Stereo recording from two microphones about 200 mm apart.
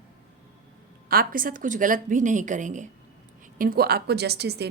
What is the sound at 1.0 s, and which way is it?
A woman's voice, 45° right (ahead or behind).